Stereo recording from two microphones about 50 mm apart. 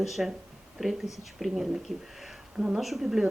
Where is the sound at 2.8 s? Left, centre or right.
Centre.